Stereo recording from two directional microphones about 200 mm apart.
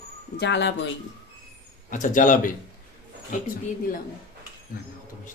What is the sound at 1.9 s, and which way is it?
Speech, 40° left (ahead or behind).